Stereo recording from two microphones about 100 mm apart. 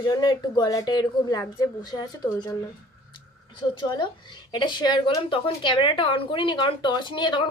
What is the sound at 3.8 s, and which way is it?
A woman's voice, 50° left (ahead or behind).